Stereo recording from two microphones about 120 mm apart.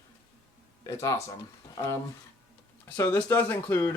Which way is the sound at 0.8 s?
25° left (ahead or behind).